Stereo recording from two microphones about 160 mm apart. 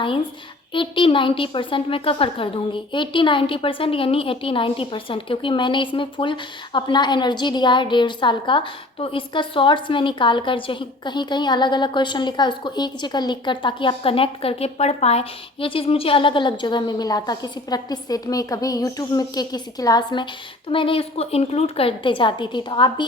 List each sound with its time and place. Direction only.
0.7 s a woman's voice: 30° left (ahead or behind)